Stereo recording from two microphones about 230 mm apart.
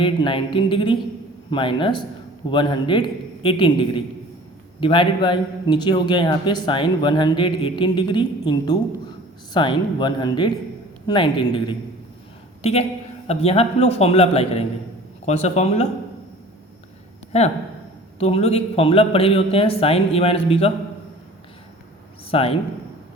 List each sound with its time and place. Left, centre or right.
0.0 s a man's voice: left
17.3 s a man's voice: left
22.3 s speech: left